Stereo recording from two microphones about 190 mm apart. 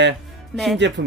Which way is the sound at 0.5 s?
Centre (ahead or behind).